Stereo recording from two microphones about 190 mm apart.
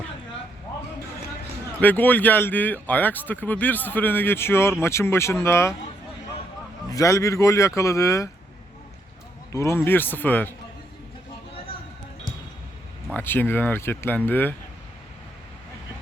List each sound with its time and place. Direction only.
1.8 s speech: 10° left (ahead or behind)
6.9 s speech: 15° left (ahead or behind)
9.5 s speech: 15° left (ahead or behind)
13.1 s speech: 10° left (ahead or behind)